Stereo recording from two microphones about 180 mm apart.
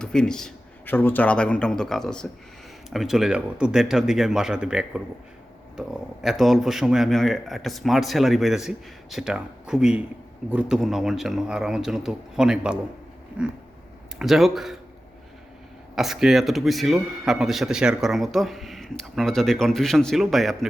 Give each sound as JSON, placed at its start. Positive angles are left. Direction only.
{"t": 0.0, "sound": "speech", "side_deg": 5}
{"t": 13.4, "sound": "a sound", "side_deg": -5}
{"t": 14.2, "sound": "speech", "side_deg": 0}
{"t": 16.0, "sound": "speech", "side_deg": 0}